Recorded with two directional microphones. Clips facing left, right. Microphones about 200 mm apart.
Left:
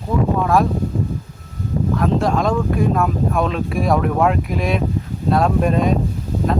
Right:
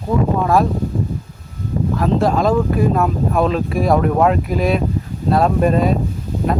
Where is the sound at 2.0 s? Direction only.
Centre (ahead or behind).